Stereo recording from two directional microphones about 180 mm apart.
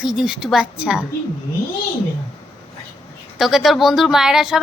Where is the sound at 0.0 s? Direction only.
Centre (ahead or behind).